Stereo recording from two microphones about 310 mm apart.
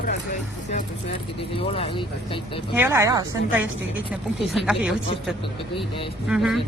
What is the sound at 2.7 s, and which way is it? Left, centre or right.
A woman's voice, centre.